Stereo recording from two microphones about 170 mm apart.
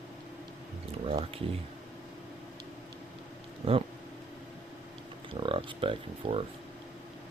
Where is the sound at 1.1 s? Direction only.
35° right (ahead or behind).